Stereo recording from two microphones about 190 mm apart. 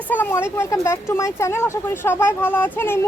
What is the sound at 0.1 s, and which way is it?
A woman's voice, 10° left (ahead or behind).